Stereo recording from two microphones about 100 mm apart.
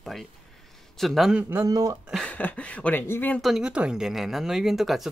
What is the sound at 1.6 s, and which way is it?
Speech, 35° right (ahead or behind).